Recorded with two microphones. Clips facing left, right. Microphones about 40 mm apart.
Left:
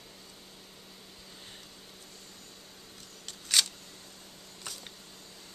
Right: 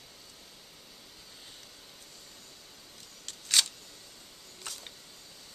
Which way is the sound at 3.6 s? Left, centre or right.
Centre.